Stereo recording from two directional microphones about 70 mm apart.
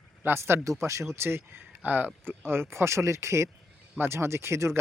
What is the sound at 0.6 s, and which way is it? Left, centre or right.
Speech, right.